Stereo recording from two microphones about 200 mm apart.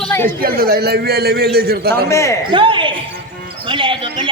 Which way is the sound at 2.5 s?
25° right (ahead or behind).